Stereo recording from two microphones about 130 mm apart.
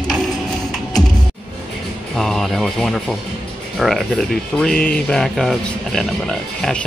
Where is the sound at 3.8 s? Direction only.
Centre (ahead or behind).